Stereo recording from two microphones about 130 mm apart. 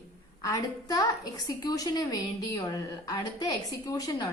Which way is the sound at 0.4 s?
25° left (ahead or behind).